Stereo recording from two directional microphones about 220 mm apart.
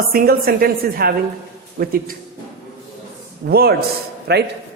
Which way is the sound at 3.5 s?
45° right (ahead or behind).